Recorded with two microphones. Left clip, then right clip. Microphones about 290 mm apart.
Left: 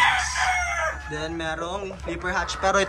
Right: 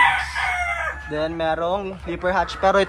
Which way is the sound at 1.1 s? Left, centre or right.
Centre.